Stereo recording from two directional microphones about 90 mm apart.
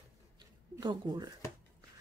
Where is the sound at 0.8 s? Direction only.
55° right (ahead or behind).